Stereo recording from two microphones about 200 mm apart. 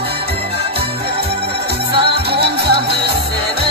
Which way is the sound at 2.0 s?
55° right (ahead or behind).